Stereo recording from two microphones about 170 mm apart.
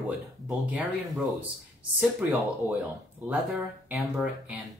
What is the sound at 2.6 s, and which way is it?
Speech, 20° left (ahead or behind).